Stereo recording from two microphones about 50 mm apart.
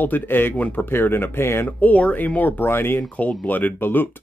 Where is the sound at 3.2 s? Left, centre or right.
Left.